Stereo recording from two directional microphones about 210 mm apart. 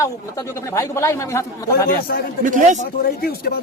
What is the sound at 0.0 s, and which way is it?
Speech, 15° left (ahead or behind).